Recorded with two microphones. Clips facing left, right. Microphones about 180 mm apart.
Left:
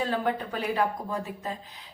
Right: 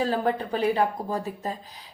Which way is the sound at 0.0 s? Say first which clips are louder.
Right 3 dB; 35° right (ahead or behind).